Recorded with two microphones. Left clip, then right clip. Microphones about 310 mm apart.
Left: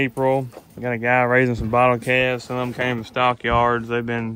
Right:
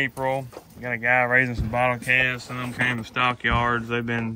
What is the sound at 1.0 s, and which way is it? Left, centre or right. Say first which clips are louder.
A man's voice: left 2 dB; centre.